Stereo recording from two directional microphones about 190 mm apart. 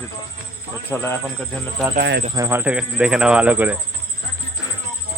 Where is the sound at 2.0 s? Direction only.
60° right (ahead or behind).